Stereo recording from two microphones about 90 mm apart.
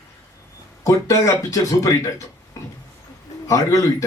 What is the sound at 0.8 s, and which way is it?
Speech, 35° left (ahead or behind).